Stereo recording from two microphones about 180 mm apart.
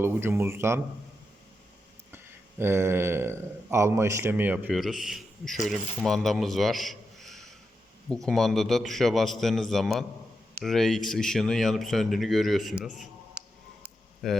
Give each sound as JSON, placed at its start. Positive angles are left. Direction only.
{"t": 0.0, "sound": "speech", "side_deg": -15}
{"t": 2.1, "sound": "speech", "side_deg": -15}
{"t": 13.8, "sound": "a sound", "side_deg": 0}